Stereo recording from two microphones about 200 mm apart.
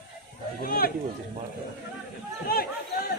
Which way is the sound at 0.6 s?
45° left (ahead or behind).